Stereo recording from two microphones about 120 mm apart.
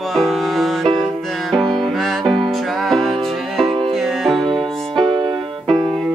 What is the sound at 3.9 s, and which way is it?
Music, centre (ahead or behind).